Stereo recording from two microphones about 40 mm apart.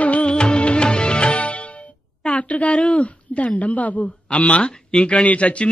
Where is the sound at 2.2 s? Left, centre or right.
Left.